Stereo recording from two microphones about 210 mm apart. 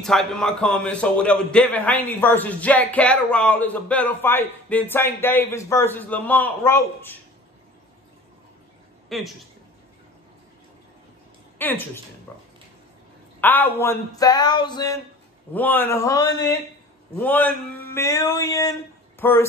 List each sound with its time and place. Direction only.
0.0 s a man's voice: centre (ahead or behind)
9.1 s speech: centre (ahead or behind)
11.5 s a woman's voice: 10° left (ahead or behind)
15.5 s a man's voice: 10° left (ahead or behind)